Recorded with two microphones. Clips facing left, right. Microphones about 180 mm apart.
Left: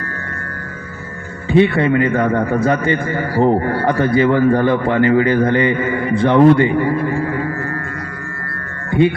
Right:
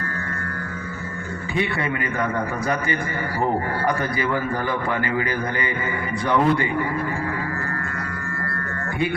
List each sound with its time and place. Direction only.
1.5 s speech: 25° left (ahead or behind)